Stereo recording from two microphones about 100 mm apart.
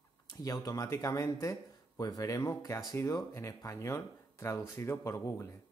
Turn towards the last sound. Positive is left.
turn(degrees=30)  # may be behind; listen again after turning